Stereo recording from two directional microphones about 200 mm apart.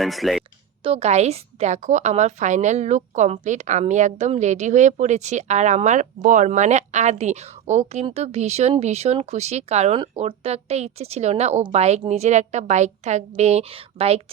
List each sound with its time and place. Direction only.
0.0 s speech: centre (ahead or behind)
0.9 s a woman's voice: 30° right (ahead or behind)